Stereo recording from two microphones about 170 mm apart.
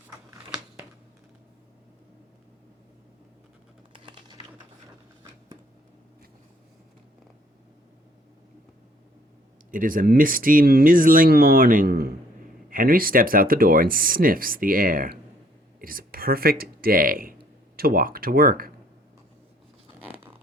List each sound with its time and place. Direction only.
0.3 s a sound: 20° right (ahead or behind)
3.9 s typing: 30° right (ahead or behind)
9.7 s speech: 55° right (ahead or behind)